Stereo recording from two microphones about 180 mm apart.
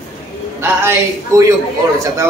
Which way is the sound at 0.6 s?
15° right (ahead or behind).